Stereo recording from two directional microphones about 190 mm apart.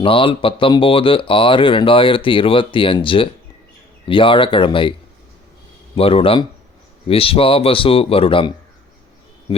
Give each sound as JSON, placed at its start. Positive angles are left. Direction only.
{"t": 0.0, "sound": "speech", "side_deg": 30}
{"t": 6.0, "sound": "speech", "side_deg": 30}